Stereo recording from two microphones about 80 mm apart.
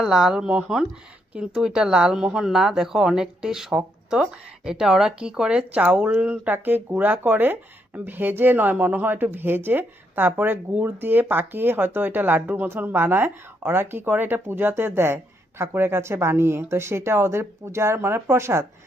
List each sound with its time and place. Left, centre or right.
0.0 s speech: centre; by 18.6 s right